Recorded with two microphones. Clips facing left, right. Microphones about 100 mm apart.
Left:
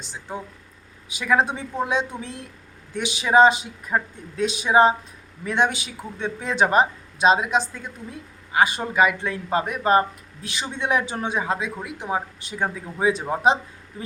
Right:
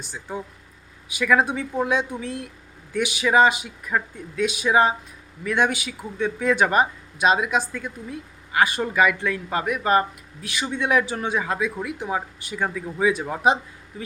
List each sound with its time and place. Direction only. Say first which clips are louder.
0.0 s speech: right 1 dB; 20° left (ahead or behind)